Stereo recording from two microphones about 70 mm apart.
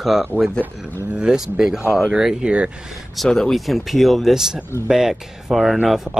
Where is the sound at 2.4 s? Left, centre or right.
Centre.